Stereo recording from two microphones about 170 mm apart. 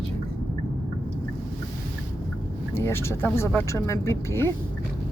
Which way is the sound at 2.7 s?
15° left (ahead or behind).